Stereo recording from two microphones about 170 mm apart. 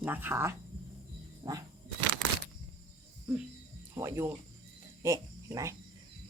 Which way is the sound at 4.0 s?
15° right (ahead or behind).